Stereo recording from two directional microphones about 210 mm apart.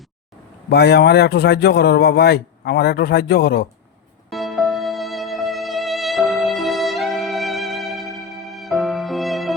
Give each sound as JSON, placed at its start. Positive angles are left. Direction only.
{"t": 0.7, "sound": "a man's voice", "side_deg": 50}
{"t": 4.3, "sound": "music", "side_deg": 0}